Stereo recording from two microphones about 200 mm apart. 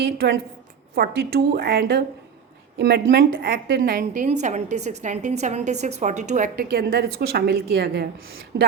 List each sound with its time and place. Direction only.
0.0 s a woman's voice: 50° right (ahead or behind)